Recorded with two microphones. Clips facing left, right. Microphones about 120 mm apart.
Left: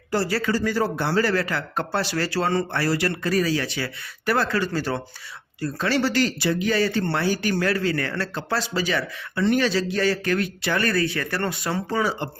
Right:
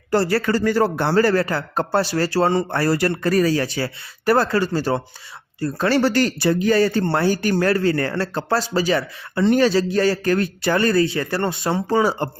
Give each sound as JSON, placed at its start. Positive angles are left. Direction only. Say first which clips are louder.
{"t": 0.1, "sound": "speech", "louder": "right 5 dB", "side_deg": -55}
{"t": 2.7, "sound": "speech", "louder": "right 4 dB", "side_deg": -45}
{"t": 5.5, "sound": "speech", "louder": "right 5 dB", "side_deg": -40}
{"t": 10.8, "sound": "speech", "louder": "right 5 dB", "side_deg": -30}